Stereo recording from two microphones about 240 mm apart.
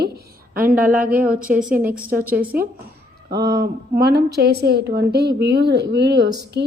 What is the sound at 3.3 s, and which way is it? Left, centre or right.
A woman's voice, right.